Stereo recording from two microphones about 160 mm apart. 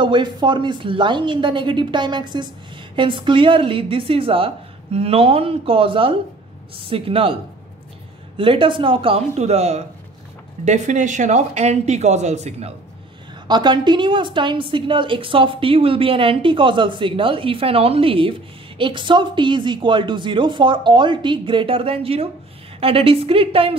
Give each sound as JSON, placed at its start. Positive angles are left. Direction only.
{"t": 0.0, "sound": "a woman's voice", "side_deg": -30}
{"t": 8.4, "sound": "a woman's voice", "side_deg": -35}
{"t": 13.5, "sound": "a woman's voice", "side_deg": -25}